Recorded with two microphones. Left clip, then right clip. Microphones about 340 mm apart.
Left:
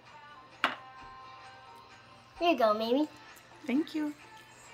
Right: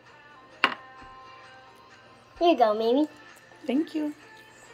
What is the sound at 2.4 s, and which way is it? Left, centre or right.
A woman's voice, left.